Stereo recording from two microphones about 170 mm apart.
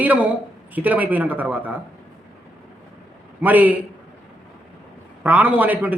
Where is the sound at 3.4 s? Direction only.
10° right (ahead or behind).